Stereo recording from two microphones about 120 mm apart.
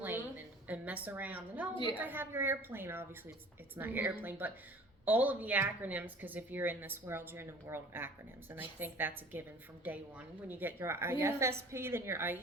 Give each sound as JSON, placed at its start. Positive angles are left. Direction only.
{"t": 0.0, "sound": "a sound", "side_deg": -15}
{"t": 1.0, "sound": "a woman's voice", "side_deg": -15}
{"t": 1.7, "sound": "a woman's voice", "side_deg": 40}
{"t": 2.0, "sound": "a woman's voice", "side_deg": -15}